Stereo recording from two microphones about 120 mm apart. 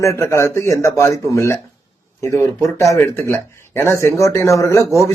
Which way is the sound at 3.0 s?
20° left (ahead or behind).